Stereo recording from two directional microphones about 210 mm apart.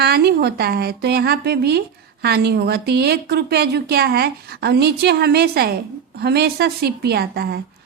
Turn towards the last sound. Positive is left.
turn(degrees=-50)  # may be behind; listen again after turning